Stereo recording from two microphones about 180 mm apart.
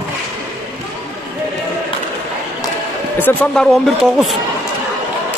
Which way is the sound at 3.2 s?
10° left (ahead or behind).